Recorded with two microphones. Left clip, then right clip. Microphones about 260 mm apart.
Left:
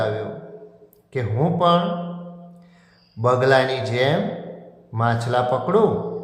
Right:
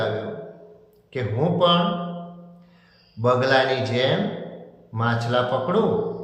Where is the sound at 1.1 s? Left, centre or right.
Left.